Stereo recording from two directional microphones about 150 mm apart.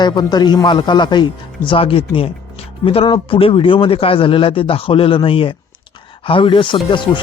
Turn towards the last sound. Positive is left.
turn(degrees=35)  # may be behind; listen again after turning